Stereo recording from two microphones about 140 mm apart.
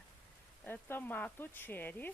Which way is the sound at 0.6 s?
15° left (ahead or behind).